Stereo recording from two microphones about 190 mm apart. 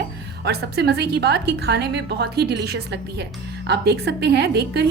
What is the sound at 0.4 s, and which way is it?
Speech, 60° right (ahead or behind).